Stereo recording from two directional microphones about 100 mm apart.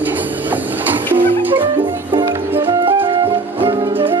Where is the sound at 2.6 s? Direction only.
60° right (ahead or behind).